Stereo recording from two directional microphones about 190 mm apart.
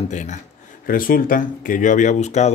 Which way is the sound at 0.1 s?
40° left (ahead or behind).